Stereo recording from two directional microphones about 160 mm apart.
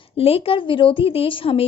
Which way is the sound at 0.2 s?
35° left (ahead or behind).